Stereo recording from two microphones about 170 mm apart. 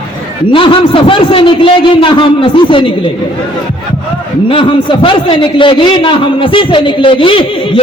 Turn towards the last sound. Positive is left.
turn(degrees=30)  # may be behind; listen again after turning